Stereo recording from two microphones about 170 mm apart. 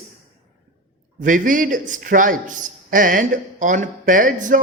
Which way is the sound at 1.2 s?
50° right (ahead or behind).